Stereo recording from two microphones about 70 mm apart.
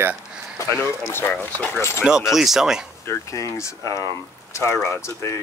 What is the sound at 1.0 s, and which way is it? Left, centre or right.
Speech, left.